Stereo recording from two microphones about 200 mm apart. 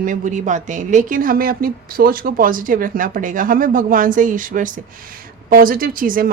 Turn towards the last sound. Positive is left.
turn(degrees=-45)  # may be behind; listen again after turning